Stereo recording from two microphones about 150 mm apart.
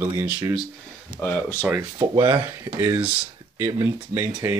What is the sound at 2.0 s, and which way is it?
Speech, 25° right (ahead or behind).